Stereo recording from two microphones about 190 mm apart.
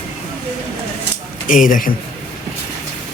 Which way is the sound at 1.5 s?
45° left (ahead or behind).